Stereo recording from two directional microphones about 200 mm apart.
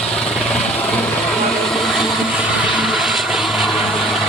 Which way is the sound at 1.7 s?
Centre (ahead or behind).